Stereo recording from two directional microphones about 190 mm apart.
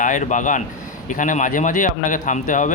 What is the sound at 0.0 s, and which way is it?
A man's voice, 40° left (ahead or behind).